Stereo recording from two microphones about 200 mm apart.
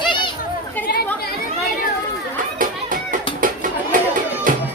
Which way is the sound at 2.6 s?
45° right (ahead or behind).